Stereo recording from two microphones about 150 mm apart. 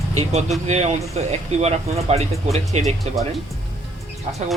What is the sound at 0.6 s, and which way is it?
Speech, 50° right (ahead or behind).